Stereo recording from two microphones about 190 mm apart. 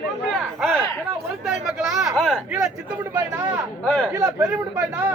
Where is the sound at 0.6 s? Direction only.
5° left (ahead or behind).